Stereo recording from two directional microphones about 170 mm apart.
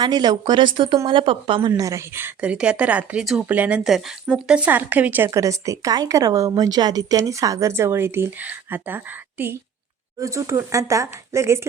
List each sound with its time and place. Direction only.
0.0 s a woman's voice: 25° right (ahead or behind)
1.7 s speech: 20° right (ahead or behind)